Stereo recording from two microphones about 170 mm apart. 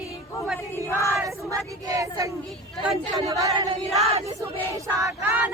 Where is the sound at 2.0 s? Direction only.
20° right (ahead or behind).